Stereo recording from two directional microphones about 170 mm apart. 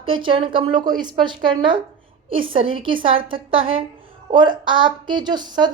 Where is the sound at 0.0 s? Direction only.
30° right (ahead or behind).